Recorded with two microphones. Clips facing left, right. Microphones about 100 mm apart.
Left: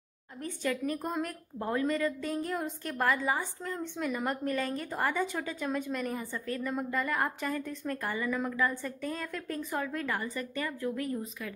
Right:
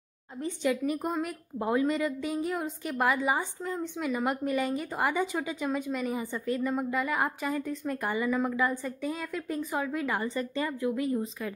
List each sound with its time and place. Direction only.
0.4 s a woman's voice: 15° right (ahead or behind)